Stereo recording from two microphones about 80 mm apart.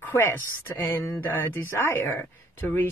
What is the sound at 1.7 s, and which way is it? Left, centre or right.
Mantra, left.